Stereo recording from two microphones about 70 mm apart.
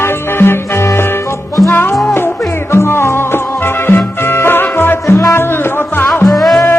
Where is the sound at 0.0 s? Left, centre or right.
Left.